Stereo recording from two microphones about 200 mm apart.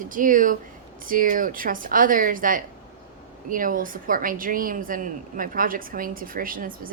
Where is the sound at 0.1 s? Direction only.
40° right (ahead or behind).